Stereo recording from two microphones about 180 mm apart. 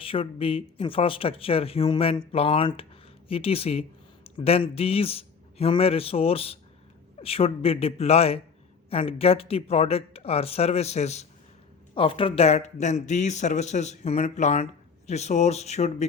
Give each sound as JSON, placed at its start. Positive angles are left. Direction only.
{"t": 0.0, "sound": "speech", "side_deg": 30}